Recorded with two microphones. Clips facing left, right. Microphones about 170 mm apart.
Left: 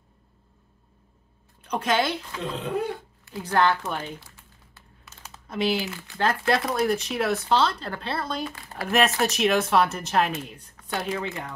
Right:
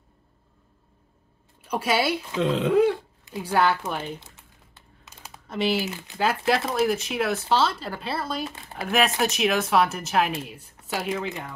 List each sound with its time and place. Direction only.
1.6 s a woman's voice: 10° right (ahead or behind)
2.3 s speech: 90° right
3.3 s a woman's voice: 20° right (ahead or behind)
3.5 s typing: 5° right (ahead or behind)
5.9 s speech: 20° right (ahead or behind)
6.1 s speech: 5° right (ahead or behind)